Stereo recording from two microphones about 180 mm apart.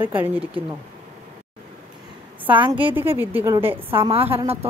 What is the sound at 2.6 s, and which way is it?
Speech, 30° right (ahead or behind).